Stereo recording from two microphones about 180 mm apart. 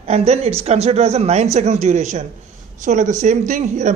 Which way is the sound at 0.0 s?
35° right (ahead or behind).